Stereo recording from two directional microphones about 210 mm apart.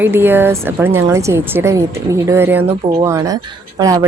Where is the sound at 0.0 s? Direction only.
10° right (ahead or behind).